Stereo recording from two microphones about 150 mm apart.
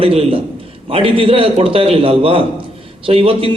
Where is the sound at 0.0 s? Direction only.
40° right (ahead or behind).